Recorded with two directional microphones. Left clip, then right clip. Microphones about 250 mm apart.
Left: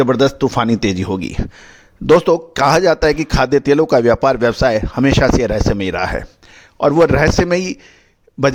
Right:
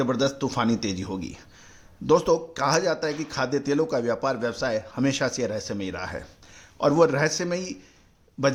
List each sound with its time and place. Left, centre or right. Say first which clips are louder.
0.0 s speech: left 11 dB; left